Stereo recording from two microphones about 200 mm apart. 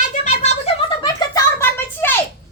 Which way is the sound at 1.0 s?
20° left (ahead or behind).